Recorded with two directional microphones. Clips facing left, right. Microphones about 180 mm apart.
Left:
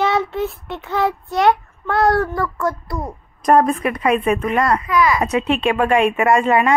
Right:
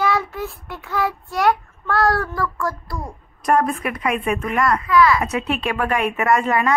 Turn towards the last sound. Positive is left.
turn(degrees=25)  # may be behind; listen again after turning